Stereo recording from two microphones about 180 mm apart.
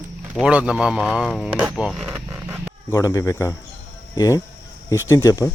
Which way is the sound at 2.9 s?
20° left (ahead or behind).